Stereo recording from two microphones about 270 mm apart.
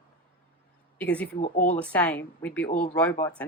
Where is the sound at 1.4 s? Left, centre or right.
Left.